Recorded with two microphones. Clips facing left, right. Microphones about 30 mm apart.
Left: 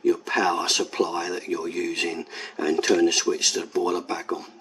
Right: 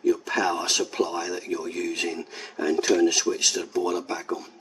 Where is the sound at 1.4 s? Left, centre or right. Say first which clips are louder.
Left 2 dB; centre.